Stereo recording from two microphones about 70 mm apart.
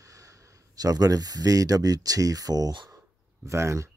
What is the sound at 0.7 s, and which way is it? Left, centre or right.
Speech, right.